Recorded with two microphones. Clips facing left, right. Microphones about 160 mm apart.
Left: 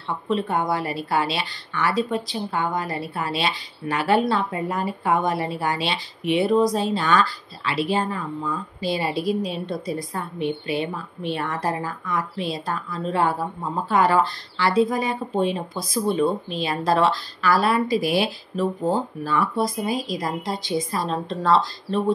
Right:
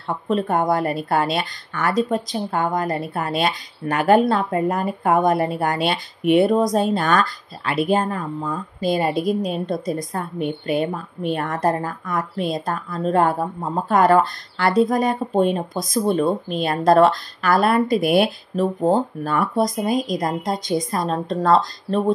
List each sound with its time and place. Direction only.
0.3 s a woman's voice: 45° right (ahead or behind)